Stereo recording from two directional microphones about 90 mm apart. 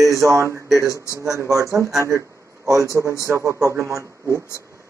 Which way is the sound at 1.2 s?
35° right (ahead or behind).